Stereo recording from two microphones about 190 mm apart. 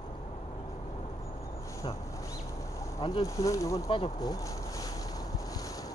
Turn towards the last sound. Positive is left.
turn(degrees=20)  # may be behind; listen again after turning